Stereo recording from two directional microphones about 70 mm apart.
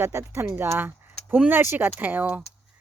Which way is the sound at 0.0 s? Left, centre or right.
Right.